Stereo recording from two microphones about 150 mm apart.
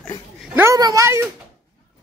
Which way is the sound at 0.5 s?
20° right (ahead or behind).